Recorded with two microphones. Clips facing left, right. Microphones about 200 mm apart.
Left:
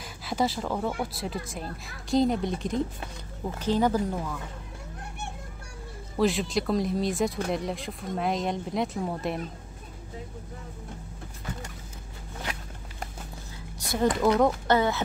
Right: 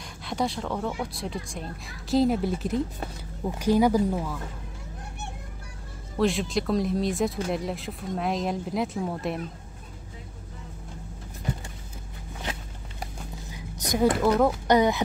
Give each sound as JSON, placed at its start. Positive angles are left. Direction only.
{"t": 0.2, "sound": "speech", "side_deg": 5}
{"t": 6.1, "sound": "speech", "side_deg": 0}
{"t": 13.7, "sound": "a sound", "side_deg": -15}
{"t": 14.2, "sound": "speech", "side_deg": 0}
{"t": 14.7, "sound": "speech", "side_deg": -15}